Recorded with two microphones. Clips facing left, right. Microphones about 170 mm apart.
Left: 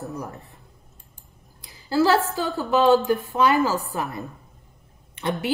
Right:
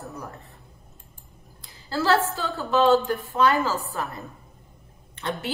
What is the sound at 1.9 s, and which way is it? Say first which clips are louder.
A woman's voice: left 3 dB; 15° left (ahead or behind).